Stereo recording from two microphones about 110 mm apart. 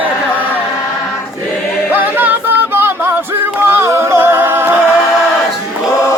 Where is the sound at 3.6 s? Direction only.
20° right (ahead or behind).